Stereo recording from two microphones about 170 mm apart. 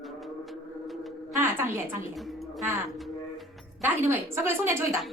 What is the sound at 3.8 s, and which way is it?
A woman's voice, 15° right (ahead or behind).